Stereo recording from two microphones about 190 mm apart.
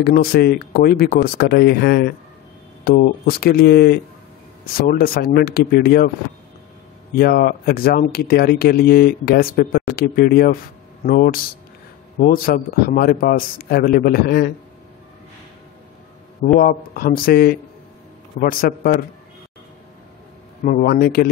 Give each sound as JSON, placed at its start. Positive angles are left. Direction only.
{"t": 0.0, "sound": "speech", "side_deg": 55}
{"t": 7.2, "sound": "speech", "side_deg": 50}
{"t": 16.5, "sound": "speech", "side_deg": 50}
{"t": 20.6, "sound": "speech", "side_deg": 50}